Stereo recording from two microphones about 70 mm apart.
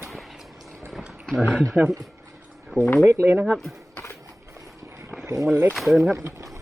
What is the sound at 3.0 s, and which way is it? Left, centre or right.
Speech, right.